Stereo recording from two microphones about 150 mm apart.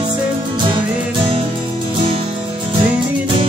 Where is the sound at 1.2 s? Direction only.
35° right (ahead or behind).